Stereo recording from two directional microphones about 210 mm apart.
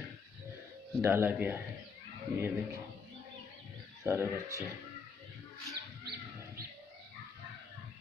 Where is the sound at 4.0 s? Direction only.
10° right (ahead or behind).